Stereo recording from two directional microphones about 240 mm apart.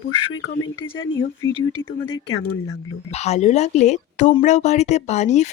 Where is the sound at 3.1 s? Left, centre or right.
Left.